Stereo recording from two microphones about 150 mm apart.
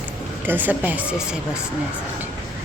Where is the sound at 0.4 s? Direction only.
10° right (ahead or behind).